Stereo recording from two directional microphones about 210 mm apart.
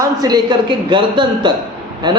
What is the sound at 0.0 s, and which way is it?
A man's voice, 20° right (ahead or behind).